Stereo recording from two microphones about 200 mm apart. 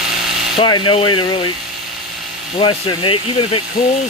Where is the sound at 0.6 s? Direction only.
25° left (ahead or behind).